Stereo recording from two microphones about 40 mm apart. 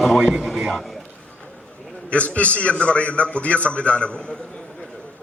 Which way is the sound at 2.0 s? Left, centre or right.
Left.